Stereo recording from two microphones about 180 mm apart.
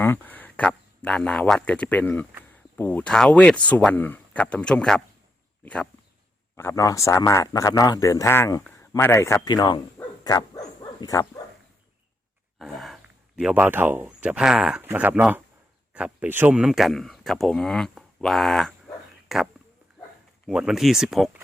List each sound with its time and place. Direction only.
0.0 s speech: 10° left (ahead or behind)
12.5 s speech: centre (ahead or behind)
20.5 s speech: 5° right (ahead or behind)